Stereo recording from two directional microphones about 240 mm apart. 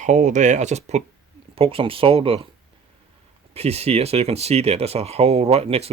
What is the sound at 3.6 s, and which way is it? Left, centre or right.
Speech, right.